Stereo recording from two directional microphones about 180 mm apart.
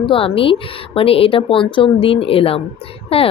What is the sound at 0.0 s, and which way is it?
Speech, 30° left (ahead or behind).